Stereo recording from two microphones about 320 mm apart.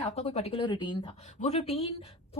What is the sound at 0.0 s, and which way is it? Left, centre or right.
Speech, centre.